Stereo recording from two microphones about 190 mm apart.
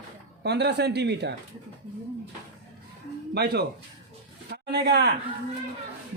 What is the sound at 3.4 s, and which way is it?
Speech, 60° right (ahead or behind).